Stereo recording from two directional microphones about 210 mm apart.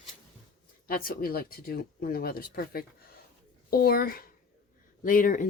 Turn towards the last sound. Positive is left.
turn(degrees=40)  # may be behind; listen again after turning